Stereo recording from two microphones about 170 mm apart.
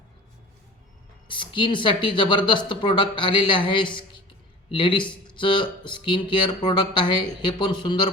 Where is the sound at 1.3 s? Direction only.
30° left (ahead or behind).